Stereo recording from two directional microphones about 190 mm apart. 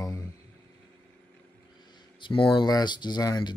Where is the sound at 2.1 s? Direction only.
25° left (ahead or behind).